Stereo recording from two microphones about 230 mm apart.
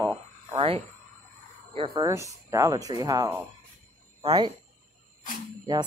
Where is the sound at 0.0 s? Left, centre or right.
Centre.